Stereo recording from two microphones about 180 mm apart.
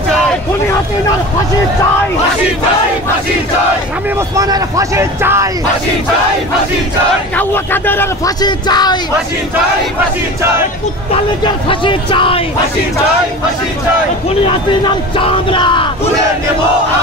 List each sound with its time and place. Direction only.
4.4 s a man's voice: 20° right (ahead or behind)
7.3 s speech: 10° left (ahead or behind)
8.4 s a man's voice: 25° left (ahead or behind)
11.4 s a man's voice: 30° left (ahead or behind)
14.9 s a man's voice: 30° left (ahead or behind)